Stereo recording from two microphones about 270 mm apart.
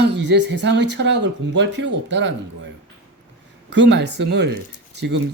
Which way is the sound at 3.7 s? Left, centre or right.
Right.